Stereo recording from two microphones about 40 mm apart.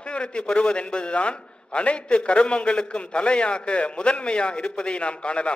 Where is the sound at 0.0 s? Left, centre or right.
Left.